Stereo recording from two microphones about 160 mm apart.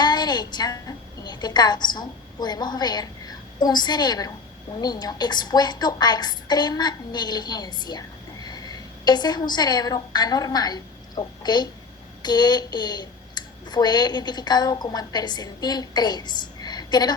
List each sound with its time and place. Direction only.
0.0 s a woman's voice: 25° left (ahead or behind)